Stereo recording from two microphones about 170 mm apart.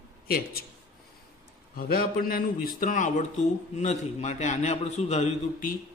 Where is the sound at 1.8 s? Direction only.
60° left (ahead or behind); by 5.3 s 40° left (ahead or behind).